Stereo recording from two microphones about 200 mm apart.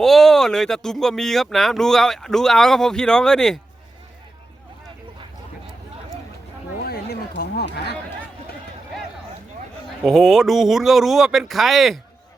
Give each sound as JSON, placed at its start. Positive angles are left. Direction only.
{"t": 0.0, "sound": "speech", "side_deg": 0}
{"t": 6.8, "sound": "a sound", "side_deg": 50}
{"t": 10.0, "sound": "speech", "side_deg": 0}